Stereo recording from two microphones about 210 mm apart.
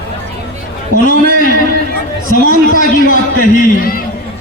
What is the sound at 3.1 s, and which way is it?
Speech, 45° left (ahead or behind).